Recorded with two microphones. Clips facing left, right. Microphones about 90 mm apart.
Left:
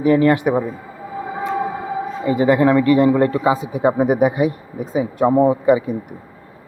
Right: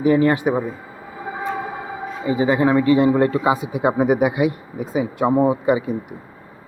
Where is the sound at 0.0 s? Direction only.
50° left (ahead or behind).